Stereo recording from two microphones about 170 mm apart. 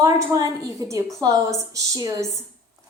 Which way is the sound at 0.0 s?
20° right (ahead or behind).